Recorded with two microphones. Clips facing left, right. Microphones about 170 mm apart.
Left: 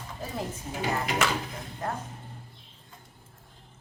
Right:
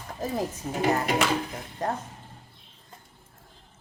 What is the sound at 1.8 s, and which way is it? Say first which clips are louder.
Speech: right 4 dB; 35° right (ahead or behind).